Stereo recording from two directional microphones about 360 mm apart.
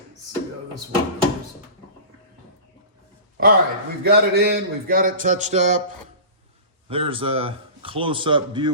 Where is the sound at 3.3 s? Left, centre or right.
Right.